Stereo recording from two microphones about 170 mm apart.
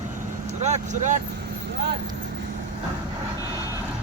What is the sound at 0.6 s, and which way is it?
Speech, 45° right (ahead or behind).